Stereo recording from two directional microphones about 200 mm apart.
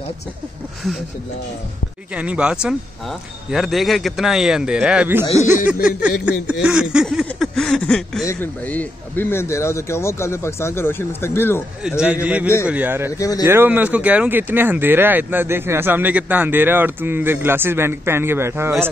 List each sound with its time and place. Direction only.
2.1 s speech: 5° right (ahead or behind); by 11.6 s 10° left (ahead or behind)
12.0 s speech: 5° right (ahead or behind)
13.2 s speech: 20° left (ahead or behind)
13.5 s speech: 10° right (ahead or behind)